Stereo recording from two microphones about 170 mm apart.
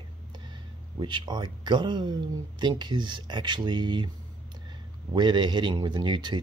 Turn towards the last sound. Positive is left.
turn(degrees=-25)  # may be behind; listen again after turning